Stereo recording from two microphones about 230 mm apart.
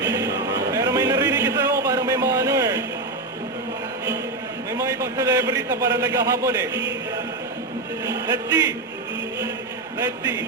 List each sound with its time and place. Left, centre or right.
0.0 s music: centre
4.7 s a man's voice: centre
8.1 s a man's voice: centre